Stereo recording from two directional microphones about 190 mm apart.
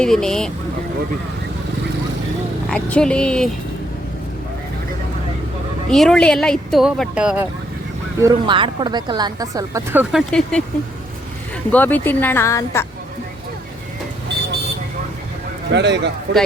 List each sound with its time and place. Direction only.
0.0 s speech: 5° left (ahead or behind)
2.6 s speech: 5° left (ahead or behind)
5.9 s speech: 5° left (ahead or behind)
8.2 s a woman's voice: 25° right (ahead or behind); by 10.6 s centre (ahead or behind)
11.7 s speech: 10° left (ahead or behind)
15.7 s a man's voice: 65° right (ahead or behind)